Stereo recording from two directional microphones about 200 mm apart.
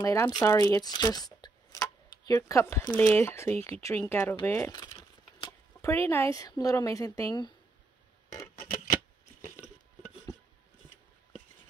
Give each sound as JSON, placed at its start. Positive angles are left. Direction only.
{"t": 0.0, "sound": "speech", "side_deg": 15}